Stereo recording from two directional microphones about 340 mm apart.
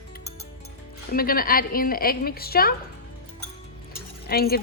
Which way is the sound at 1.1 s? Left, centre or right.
Left.